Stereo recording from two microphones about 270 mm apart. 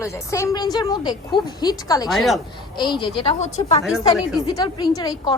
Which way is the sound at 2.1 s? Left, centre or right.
Centre.